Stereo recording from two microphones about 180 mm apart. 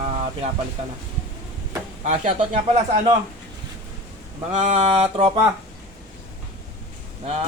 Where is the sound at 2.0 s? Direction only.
40° right (ahead or behind).